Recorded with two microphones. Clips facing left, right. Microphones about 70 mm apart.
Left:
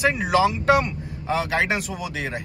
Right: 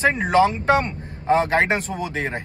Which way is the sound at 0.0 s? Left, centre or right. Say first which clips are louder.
Right 2 dB; right.